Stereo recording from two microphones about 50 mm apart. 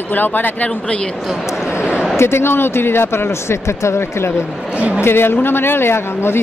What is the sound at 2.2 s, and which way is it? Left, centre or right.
Speech, left.